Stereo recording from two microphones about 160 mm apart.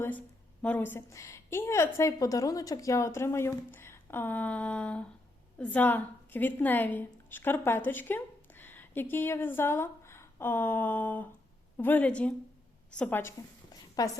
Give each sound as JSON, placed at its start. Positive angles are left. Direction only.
{"t": 0.0, "sound": "a woman's voice", "side_deg": 10}
{"t": 14.0, "sound": "a woman's voice", "side_deg": 25}